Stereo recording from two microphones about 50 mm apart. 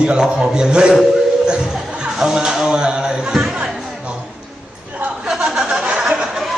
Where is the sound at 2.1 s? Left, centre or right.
Centre.